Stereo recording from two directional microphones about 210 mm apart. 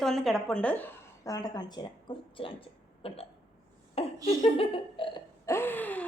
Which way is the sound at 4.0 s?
30° left (ahead or behind).